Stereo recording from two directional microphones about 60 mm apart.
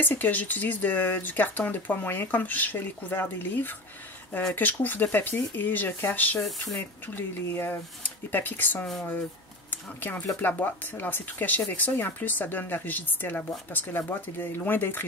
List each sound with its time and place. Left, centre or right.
0.0 s speech: left